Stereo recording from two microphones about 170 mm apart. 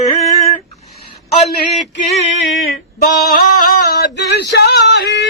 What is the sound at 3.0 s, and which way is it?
Male singing, 65° left (ahead or behind).